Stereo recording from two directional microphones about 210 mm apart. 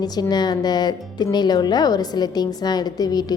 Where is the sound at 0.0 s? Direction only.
20° left (ahead or behind).